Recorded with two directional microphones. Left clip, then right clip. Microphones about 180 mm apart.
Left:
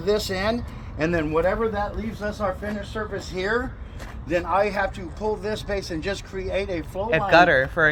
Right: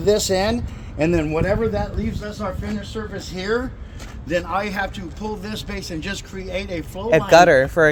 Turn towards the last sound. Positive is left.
turn(degrees=-45)  # may be behind; listen again after turning